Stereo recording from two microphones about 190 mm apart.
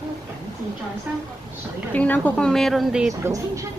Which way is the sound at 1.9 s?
10° left (ahead or behind).